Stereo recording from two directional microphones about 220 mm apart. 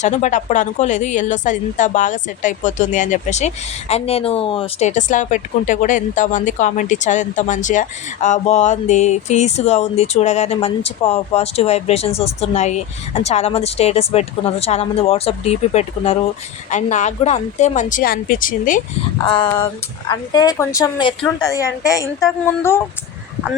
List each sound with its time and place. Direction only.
0.0 s a woman's voice: 35° left (ahead or behind)
19.2 s a woman's voice: 20° left (ahead or behind)